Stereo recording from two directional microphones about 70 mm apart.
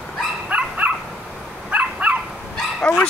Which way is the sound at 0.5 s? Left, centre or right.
Right.